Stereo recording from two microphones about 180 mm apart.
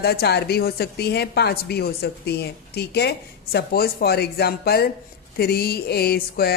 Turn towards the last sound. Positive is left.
turn(degrees=60)  # may be behind; listen again after turning